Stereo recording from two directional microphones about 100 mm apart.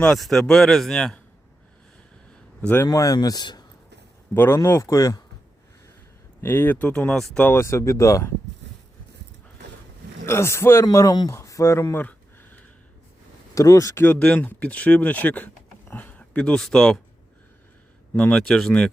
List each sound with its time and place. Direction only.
0.0 s speech: 5° left (ahead or behind)
2.6 s a man's voice: 15° left (ahead or behind)
2.8 s speech: 35° left (ahead or behind)
4.4 s speech: 25° left (ahead or behind)
6.4 s speech: 20° left (ahead or behind)
7.1 s speech: 5° left (ahead or behind)
7.4 s speech: 25° left (ahead or behind)
10.2 s speech: 30° left (ahead or behind)
10.9 s speech: 35° left (ahead or behind)
12.0 s a sound: 15° left (ahead or behind)
13.5 s speech: 35° left (ahead or behind)
14.0 s speech: 15° left (ahead or behind)
18.2 s speech: 5° left (ahead or behind)